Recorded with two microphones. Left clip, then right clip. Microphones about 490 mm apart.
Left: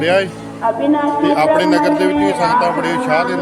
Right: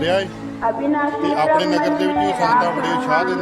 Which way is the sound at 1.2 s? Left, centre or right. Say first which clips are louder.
Left 4 dB; right.